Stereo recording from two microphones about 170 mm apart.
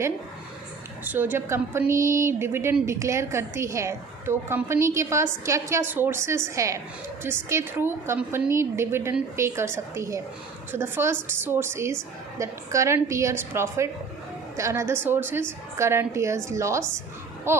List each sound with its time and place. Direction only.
1.0 s a woman's voice: 10° right (ahead or behind)